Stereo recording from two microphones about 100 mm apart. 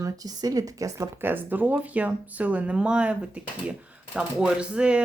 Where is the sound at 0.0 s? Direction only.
35° right (ahead or behind).